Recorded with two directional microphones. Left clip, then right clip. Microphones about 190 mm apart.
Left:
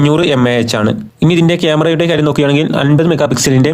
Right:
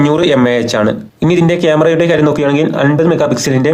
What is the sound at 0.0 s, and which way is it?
Speech, 40° left (ahead or behind).